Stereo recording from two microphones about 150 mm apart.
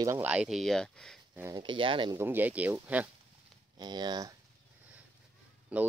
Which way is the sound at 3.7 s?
30° right (ahead or behind).